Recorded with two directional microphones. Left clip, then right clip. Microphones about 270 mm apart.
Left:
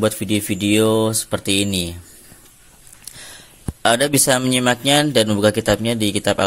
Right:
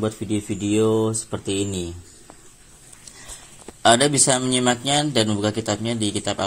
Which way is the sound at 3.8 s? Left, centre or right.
Left.